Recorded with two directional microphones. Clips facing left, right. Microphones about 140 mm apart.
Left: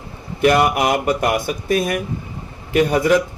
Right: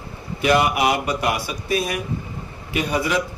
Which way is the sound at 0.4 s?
50° left (ahead or behind).